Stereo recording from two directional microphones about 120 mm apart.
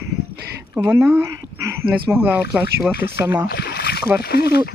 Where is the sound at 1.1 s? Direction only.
25° right (ahead or behind).